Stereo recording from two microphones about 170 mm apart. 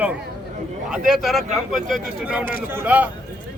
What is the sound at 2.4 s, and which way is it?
Speech, 55° left (ahead or behind).